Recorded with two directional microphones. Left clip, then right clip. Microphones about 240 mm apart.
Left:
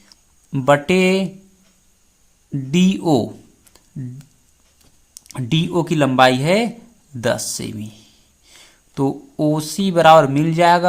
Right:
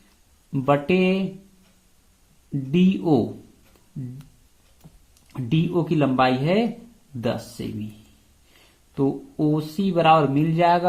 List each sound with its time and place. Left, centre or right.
0.5 s speech: left
2.7 s speech: left
5.3 s speech: left